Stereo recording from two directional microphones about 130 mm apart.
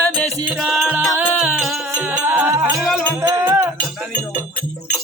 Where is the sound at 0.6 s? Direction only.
Centre (ahead or behind).